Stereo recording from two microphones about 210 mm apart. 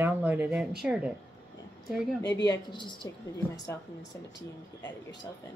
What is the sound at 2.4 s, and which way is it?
Speech, 20° left (ahead or behind).